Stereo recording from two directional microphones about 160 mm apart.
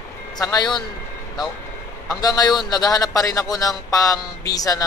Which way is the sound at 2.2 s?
25° left (ahead or behind).